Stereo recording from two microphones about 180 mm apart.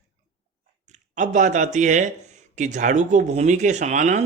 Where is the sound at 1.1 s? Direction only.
45° right (ahead or behind).